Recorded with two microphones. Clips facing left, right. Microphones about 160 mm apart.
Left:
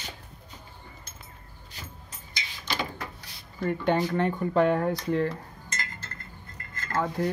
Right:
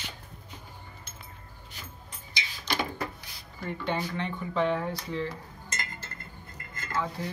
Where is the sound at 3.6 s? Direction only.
50° left (ahead or behind).